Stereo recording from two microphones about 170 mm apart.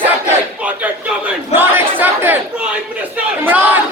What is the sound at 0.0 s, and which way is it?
Battle cry, 10° right (ahead or behind).